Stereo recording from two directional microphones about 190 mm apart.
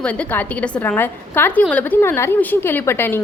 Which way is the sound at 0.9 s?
10° left (ahead or behind).